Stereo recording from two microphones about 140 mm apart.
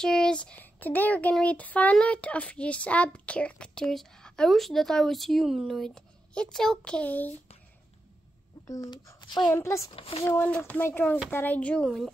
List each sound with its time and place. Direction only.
0.0 s speech: 5° left (ahead or behind)
8.6 s a child's voice: 25° left (ahead or behind)
9.5 s a child's voice: 20° left (ahead or behind)
9.8 s speech: 40° left (ahead or behind)
10.2 s speech: 15° left (ahead or behind)